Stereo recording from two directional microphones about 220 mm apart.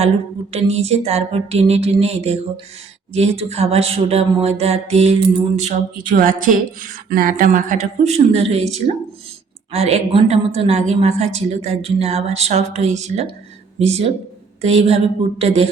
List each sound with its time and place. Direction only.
0.5 s speech: 30° right (ahead or behind)